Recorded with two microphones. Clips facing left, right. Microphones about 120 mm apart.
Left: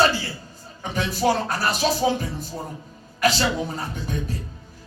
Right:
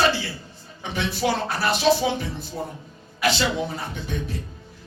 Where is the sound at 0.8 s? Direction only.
40° left (ahead or behind).